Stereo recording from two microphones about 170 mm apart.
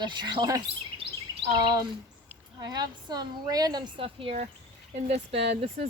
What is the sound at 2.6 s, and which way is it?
A woman's voice, 25° right (ahead or behind).